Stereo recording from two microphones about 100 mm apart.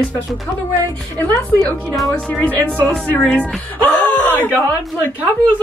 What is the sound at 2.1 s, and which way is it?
Speech, 10° left (ahead or behind).